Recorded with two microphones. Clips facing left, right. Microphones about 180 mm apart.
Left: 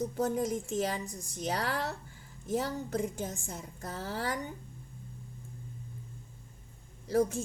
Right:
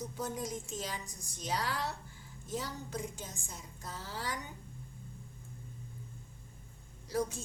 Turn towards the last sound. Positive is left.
turn(degrees=55)  # may be behind; listen again after turning